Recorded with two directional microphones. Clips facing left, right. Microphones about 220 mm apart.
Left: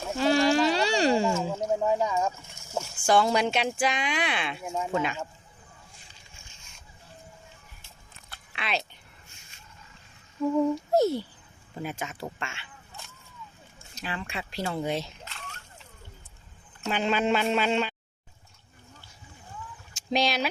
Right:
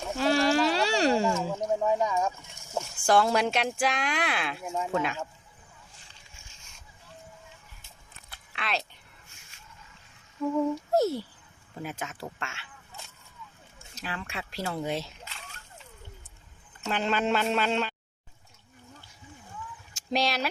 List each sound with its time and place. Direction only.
0.0 s a sound: centre (ahead or behind)
2.7 s speech: centre (ahead or behind)
8.5 s speech: centre (ahead or behind)
10.9 s speech: centre (ahead or behind)
13.9 s speech: centre (ahead or behind)
16.8 s speech: 5° left (ahead or behind)
20.1 s speech: centre (ahead or behind)